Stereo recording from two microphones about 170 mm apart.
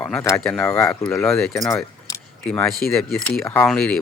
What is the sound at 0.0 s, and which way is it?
Speech, 15° left (ahead or behind).